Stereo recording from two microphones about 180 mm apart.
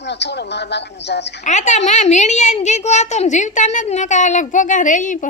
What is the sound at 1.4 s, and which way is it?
A woman's voice, 40° left (ahead or behind).